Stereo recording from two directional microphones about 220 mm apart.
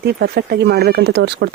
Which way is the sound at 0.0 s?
45° right (ahead or behind).